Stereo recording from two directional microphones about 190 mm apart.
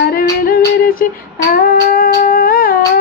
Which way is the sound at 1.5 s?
50° left (ahead or behind).